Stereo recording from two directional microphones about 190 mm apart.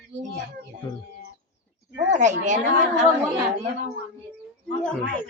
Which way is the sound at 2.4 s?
40° right (ahead or behind).